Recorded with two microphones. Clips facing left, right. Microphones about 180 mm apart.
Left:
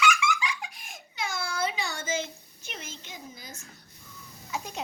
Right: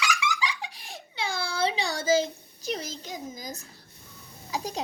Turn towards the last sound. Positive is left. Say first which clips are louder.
# right 3 dB
turn(degrees=-35)  # may be behind; listen again after turning